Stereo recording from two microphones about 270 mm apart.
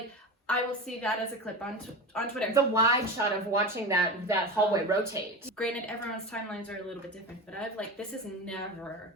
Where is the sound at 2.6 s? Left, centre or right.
Centre.